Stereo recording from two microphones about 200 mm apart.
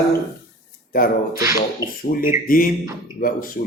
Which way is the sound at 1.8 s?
15° right (ahead or behind).